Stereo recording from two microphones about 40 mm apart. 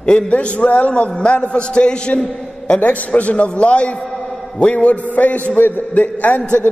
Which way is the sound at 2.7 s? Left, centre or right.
Left.